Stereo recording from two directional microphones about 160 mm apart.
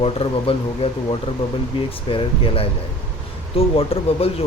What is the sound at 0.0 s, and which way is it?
Speech, 35° left (ahead or behind).